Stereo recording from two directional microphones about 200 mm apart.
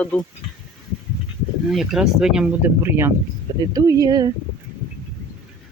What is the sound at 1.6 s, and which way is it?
Speech, centre (ahead or behind).